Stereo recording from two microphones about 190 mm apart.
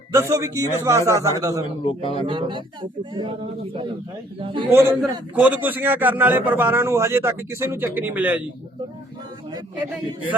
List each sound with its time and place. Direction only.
0.1 s a man's voice: 15° right (ahead or behind)
1.8 s speech: 30° left (ahead or behind)
2.2 s speech: 25° right (ahead or behind)
4.4 s speech: 25° right (ahead or behind)
4.7 s a man's voice: 15° right (ahead or behind)